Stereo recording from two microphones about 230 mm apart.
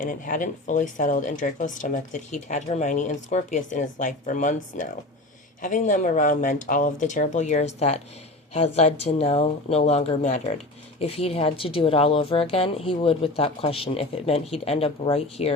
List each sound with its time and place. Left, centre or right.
0.0 s speech: left